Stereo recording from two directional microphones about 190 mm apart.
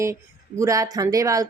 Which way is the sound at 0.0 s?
15° right (ahead or behind).